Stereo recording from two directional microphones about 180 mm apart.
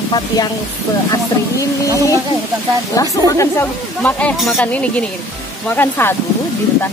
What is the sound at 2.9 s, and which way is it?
Speech, 20° left (ahead or behind).